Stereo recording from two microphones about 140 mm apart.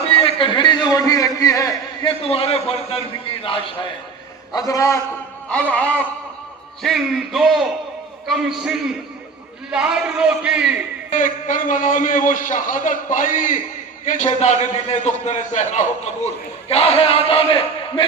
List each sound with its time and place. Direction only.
0.1 s a man's voice: 40° left (ahead or behind); by 1.7 s 25° left (ahead or behind)
2.0 s a man's voice: 40° left (ahead or behind)
4.5 s a man's voice: 25° left (ahead or behind)
5.5 s speech: 10° left (ahead or behind)
6.8 s a man's voice: centre (ahead or behind)
11.1 s a man's voice: 65° left (ahead or behind)
14.4 s a man's voice: 55° left (ahead or behind); by 18.0 s 40° left (ahead or behind)